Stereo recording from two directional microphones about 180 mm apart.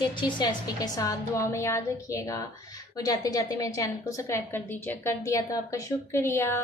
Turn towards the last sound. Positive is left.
turn(degrees=15)  # may be behind; listen again after turning